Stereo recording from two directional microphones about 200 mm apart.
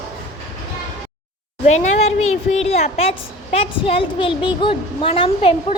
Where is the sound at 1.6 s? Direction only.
35° left (ahead or behind).